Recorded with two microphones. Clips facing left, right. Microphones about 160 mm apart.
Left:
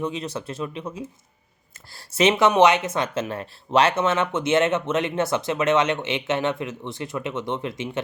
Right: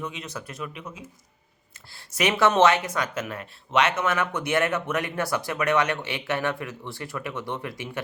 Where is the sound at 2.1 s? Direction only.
25° left (ahead or behind).